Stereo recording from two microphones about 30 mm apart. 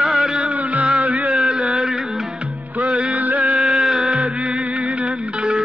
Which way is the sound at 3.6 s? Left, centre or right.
Centre.